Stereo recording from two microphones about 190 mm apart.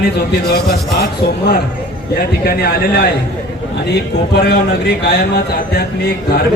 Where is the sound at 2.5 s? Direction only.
55° left (ahead or behind).